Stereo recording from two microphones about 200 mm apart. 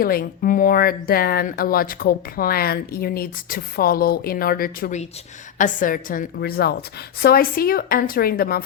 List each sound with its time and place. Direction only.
0.0 s speech: 45° left (ahead or behind)